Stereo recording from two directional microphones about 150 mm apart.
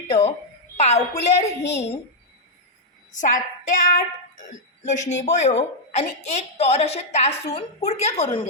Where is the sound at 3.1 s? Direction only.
55° left (ahead or behind).